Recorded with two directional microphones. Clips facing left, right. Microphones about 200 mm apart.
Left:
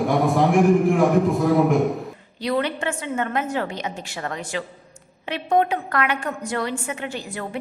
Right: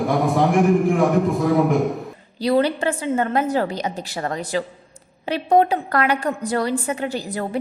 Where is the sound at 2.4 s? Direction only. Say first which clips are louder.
Right 5 dB; 35° right (ahead or behind).